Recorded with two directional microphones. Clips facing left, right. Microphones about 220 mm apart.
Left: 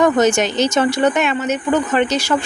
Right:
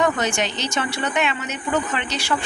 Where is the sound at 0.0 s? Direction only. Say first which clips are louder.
Left 8 dB; 45° left (ahead or behind).